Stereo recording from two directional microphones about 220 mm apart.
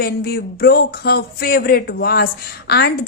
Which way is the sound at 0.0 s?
45° left (ahead or behind).